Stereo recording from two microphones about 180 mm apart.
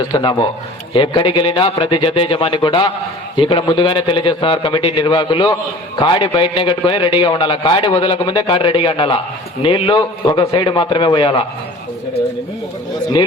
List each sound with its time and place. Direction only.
0.1 s a man's voice: 25° left (ahead or behind)